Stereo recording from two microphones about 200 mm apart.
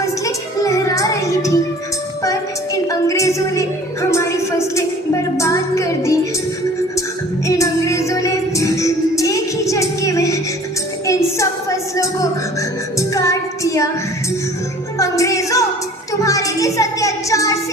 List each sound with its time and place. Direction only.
0.0 s music: 15° left (ahead or behind)
2.9 s a woman's voice: 15° left (ahead or behind)
4.1 s a sound: 15° left (ahead or behind)
5.4 s music: 15° left (ahead or behind)
7.4 s music: 15° left (ahead or behind)
11.0 s a sound: 15° left (ahead or behind)
13.0 s female singing: 15° left (ahead or behind)
14.9 s music: 15° left (ahead or behind)